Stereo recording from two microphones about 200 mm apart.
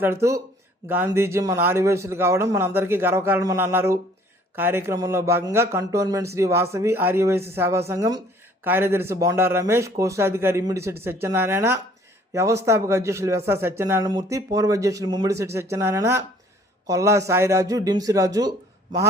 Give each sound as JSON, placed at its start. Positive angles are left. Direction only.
{"t": 0.0, "sound": "speech", "side_deg": -15}